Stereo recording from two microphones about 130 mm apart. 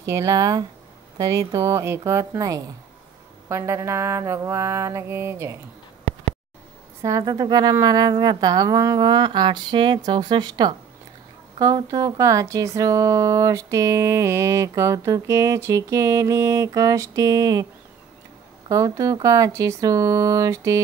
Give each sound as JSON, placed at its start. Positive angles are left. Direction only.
{"t": 0.0, "sound": "speech", "side_deg": -25}
{"t": 7.0, "sound": "speech", "side_deg": -25}
{"t": 18.7, "sound": "speech", "side_deg": -25}